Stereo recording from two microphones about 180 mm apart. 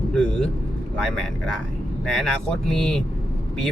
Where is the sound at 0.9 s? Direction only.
Centre (ahead or behind).